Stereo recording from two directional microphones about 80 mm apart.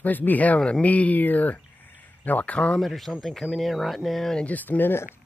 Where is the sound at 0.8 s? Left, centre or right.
Centre.